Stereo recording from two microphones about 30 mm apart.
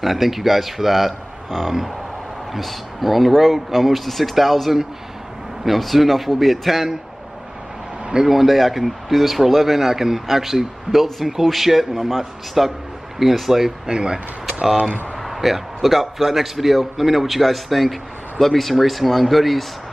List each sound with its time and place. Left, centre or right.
0.0 s a man's voice: centre
2.6 s a man's voice: centre
8.3 s a man's voice: centre
13.8 s speech: right
15.2 s a man's voice: centre